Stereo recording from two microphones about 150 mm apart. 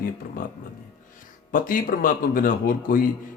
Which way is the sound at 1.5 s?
65° left (ahead or behind).